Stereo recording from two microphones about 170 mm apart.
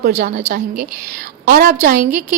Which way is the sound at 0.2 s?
50° right (ahead or behind).